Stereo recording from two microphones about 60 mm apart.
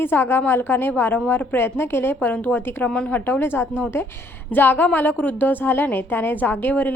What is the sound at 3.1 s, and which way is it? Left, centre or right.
A woman's voice, left.